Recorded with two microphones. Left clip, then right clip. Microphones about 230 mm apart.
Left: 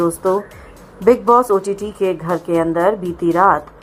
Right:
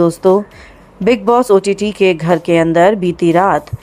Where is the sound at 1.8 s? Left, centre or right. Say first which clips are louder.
Right 7 dB; right.